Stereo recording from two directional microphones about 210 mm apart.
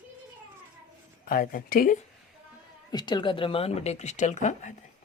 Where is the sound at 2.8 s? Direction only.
20° left (ahead or behind).